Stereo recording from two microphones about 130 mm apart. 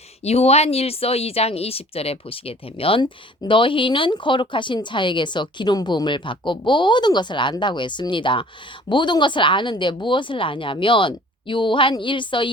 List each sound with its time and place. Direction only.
0.2 s speech: 50° left (ahead or behind)